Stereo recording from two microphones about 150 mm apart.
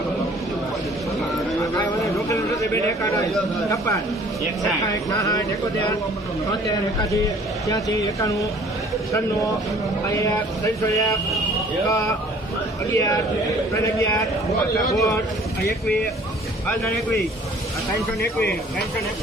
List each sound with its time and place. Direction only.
1.6 s a sound: 20° left (ahead or behind)
3.6 s speech: 20° left (ahead or behind)
5.1 s speech: 20° left (ahead or behind)
7.0 s speech: 20° left (ahead or behind)
17.9 s speech: 90° left